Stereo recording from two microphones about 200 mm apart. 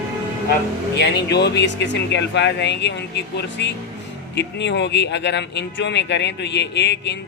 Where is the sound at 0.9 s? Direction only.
55° left (ahead or behind).